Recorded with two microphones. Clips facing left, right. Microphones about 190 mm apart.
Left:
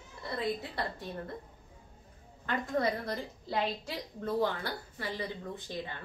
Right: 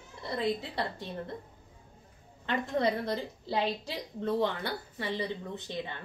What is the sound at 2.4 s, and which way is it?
Speech, 25° right (ahead or behind).